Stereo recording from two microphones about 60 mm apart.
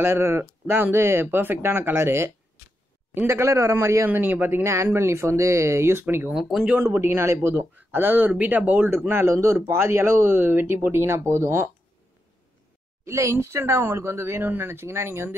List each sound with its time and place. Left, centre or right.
0.0 s speech: right
4.1 s speech: right
4.8 s speech: right
6.6 s speech: right
6.9 s speech: right
9.1 s speech: right
13.0 s a woman's voice: right
13.7 s speech: right